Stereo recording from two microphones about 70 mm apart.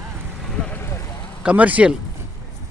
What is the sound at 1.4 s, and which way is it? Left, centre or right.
Speech, right.